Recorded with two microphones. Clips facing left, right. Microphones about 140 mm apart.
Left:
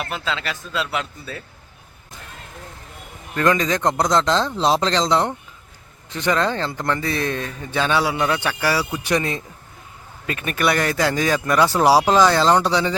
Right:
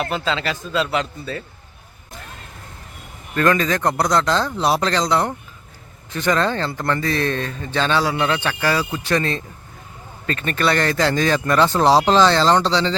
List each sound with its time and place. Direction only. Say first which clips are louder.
0.1 s a man's voice: right 4 dB; centre (ahead or behind)
3.3 s speech: right 1 dB; 15° left (ahead or behind)